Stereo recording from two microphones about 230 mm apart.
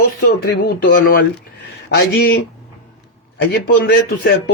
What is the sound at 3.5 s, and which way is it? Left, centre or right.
Speech, left.